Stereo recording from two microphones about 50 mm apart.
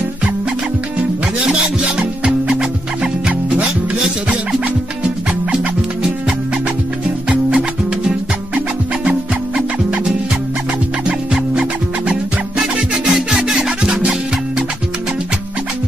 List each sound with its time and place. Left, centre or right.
1.4 s music: right
7.2 s music: centre
11.1 s music: centre
12.9 s music: centre